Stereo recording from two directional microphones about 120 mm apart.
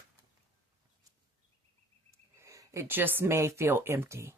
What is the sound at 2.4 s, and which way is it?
Speech, 25° right (ahead or behind).